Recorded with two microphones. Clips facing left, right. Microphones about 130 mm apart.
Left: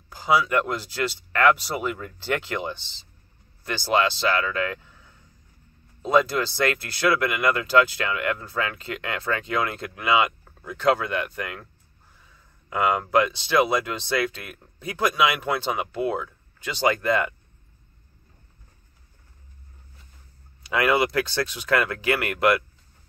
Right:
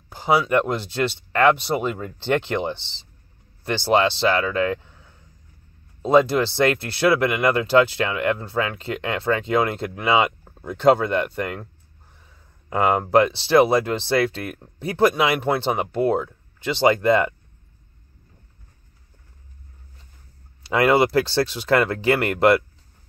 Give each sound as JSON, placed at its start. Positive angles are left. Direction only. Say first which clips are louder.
{"t": 0.1, "sound": "speech", "louder": "right 3 dB", "side_deg": -25}
{"t": 6.0, "sound": "speech", "louder": "right 4 dB", "side_deg": -30}
{"t": 12.6, "sound": "speech", "louder": "right 3 dB", "side_deg": -35}
{"t": 20.6, "sound": "speech", "louder": "right 4 dB", "side_deg": -35}